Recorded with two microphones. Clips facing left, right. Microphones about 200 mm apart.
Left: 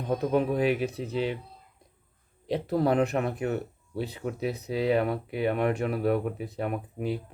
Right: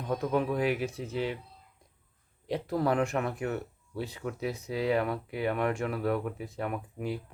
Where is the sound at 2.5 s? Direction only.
30° left (ahead or behind).